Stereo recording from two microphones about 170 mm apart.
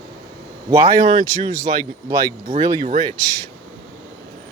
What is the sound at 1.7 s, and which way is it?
Speech, 40° right (ahead or behind).